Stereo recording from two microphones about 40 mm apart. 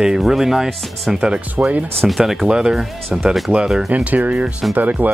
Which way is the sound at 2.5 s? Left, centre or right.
Centre.